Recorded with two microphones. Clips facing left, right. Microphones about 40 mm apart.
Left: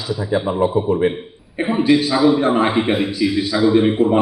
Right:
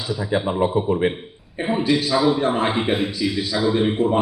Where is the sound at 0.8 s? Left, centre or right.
Right.